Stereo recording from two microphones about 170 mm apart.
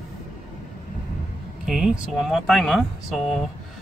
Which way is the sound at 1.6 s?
5° right (ahead or behind).